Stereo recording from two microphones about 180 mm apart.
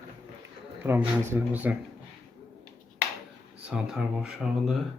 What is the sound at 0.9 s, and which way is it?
Speech, 10° right (ahead or behind).